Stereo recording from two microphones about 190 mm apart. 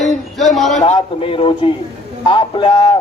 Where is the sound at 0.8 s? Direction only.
35° left (ahead or behind).